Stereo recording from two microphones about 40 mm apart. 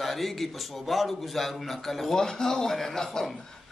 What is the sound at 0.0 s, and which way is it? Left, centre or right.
Speech, centre.